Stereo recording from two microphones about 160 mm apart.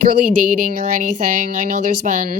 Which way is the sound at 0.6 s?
50° right (ahead or behind).